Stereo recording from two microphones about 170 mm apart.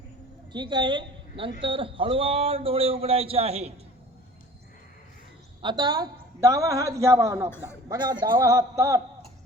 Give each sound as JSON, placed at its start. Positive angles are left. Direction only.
{"t": 0.5, "sound": "a woman's voice", "side_deg": -25}
{"t": 5.6, "sound": "a woman's voice", "side_deg": -25}